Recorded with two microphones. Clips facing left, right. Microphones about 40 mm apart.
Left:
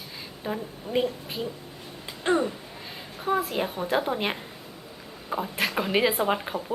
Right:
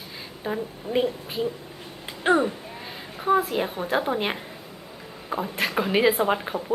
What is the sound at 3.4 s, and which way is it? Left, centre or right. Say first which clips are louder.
A woman's voice: right 1 dB; centre.